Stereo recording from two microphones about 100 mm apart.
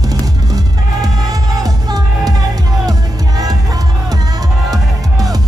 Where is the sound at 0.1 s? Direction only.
40° right (ahead or behind).